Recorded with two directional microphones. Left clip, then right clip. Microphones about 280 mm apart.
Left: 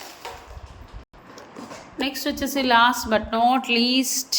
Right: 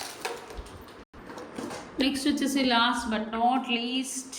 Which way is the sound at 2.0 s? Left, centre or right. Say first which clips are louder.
Left 1 dB; centre.